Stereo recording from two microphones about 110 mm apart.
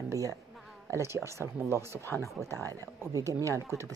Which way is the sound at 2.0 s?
25° left (ahead or behind).